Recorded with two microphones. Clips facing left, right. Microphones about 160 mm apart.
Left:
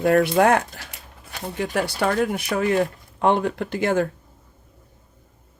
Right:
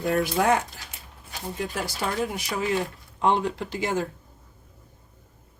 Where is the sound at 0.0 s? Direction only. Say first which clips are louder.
Left 6 dB; 70° left (ahead or behind).